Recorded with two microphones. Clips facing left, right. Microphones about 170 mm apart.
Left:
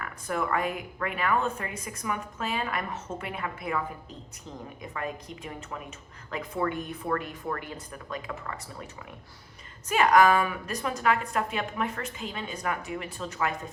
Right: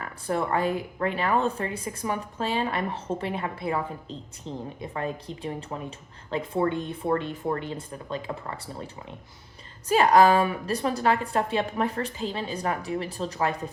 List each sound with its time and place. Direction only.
0.0 s speech: 30° right (ahead or behind)